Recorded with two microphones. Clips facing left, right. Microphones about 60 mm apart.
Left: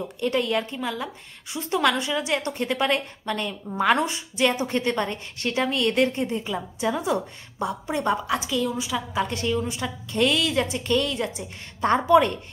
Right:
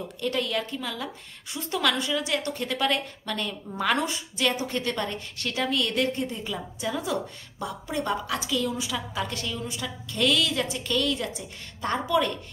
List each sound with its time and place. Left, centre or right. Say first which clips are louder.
0.0 s a woman's voice: left 4 dB; centre
9.1 s a woman's voice: left 7 dB; left